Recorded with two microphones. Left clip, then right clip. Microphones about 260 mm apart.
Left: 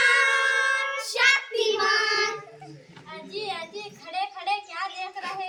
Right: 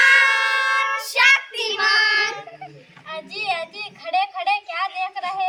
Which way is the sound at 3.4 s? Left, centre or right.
Centre.